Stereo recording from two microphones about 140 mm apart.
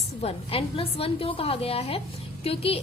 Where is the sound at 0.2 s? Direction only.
45° left (ahead or behind).